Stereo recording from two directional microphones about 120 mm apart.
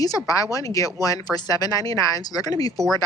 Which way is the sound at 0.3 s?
30° left (ahead or behind).